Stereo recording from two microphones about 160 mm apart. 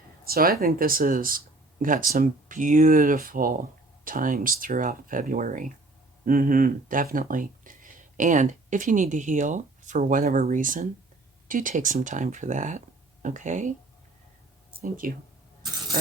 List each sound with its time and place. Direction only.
0.3 s speech: 65° right (ahead or behind); by 13.7 s 50° right (ahead or behind)
14.8 s speech: 65° right (ahead or behind)